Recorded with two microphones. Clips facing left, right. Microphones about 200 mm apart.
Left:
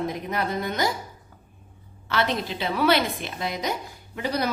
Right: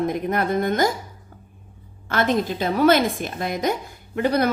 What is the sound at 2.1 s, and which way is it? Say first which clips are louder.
A woman's voice: right 5 dB; 45° right (ahead or behind).